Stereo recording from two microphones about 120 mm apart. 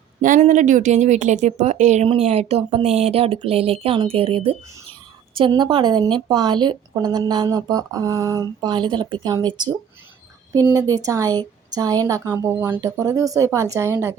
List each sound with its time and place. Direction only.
0.2 s speech: 90° right
2.0 s a woman's voice: 65° right (ahead or behind); by 14.2 s 20° right (ahead or behind)